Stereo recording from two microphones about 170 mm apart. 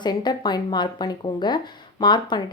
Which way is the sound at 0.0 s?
25° left (ahead or behind).